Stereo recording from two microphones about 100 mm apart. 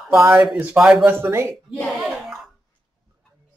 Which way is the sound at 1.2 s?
25° right (ahead or behind).